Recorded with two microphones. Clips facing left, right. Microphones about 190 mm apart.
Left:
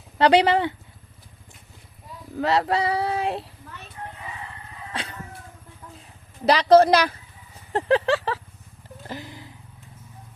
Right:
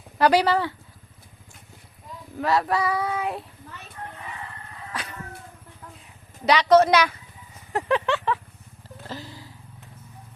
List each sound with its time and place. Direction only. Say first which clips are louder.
0.2 s female singing: left 2 dB; 25° left (ahead or behind)
2.4 s female singing: left 1 dB; 25° left (ahead or behind)
4.9 s chicken: left 1 dB; 30° left (ahead or behind)
6.4 s speech: left 2 dB; 35° left (ahead or behind)
7.7 s a sound: left 3 dB; 30° left (ahead or behind)
9.0 s a sound: left 1 dB; 20° left (ahead or behind)